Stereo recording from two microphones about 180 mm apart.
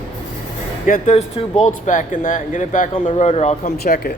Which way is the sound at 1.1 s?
40° left (ahead or behind).